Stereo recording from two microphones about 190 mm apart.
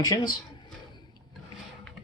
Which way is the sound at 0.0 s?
20° left (ahead or behind).